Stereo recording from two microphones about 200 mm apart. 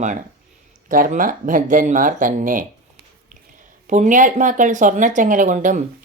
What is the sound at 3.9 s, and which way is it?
Speech, 40° right (ahead or behind).